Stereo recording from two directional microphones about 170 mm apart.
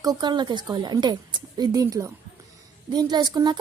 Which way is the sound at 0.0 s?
25° right (ahead or behind).